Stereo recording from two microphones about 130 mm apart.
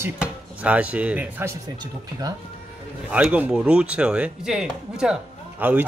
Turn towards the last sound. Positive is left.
turn(degrees=-15)  # may be behind; listen again after turning